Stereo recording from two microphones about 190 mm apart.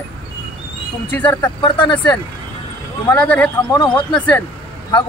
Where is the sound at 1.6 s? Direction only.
25° left (ahead or behind).